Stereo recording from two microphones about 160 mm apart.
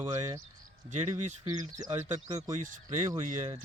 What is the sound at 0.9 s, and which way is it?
Speech, 45° right (ahead or behind).